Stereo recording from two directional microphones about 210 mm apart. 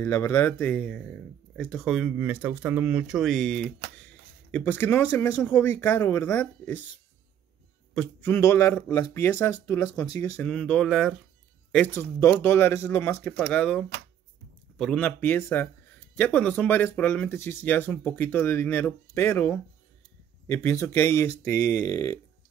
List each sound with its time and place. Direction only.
0.0 s speech: 10° left (ahead or behind)
7.9 s speech: 5° left (ahead or behind)
10.5 s speech: 5° left (ahead or behind)